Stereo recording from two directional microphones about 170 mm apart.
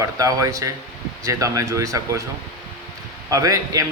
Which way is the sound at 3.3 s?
20° right (ahead or behind).